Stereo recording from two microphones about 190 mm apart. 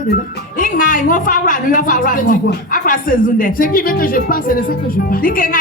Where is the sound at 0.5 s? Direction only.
45° left (ahead or behind).